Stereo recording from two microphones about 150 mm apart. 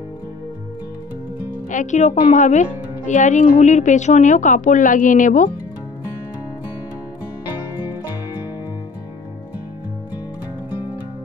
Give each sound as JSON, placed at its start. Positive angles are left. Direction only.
{"t": 1.7, "sound": "a woman's voice", "side_deg": 55}